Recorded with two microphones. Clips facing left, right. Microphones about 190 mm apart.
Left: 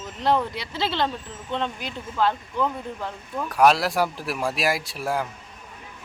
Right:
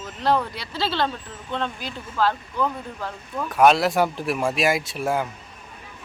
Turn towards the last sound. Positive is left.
turn(degrees=0)  # may be behind; listen again after turning